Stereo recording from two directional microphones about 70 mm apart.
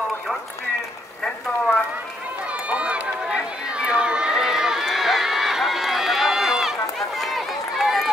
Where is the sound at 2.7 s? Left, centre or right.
Centre.